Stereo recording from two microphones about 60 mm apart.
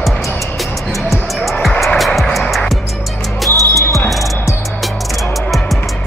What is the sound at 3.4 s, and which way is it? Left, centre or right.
Music, left.